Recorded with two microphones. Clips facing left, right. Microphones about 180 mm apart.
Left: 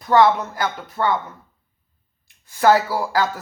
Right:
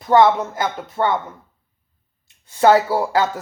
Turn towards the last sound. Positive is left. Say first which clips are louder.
# right 3 dB
turn(degrees=-25)  # may be behind; listen again after turning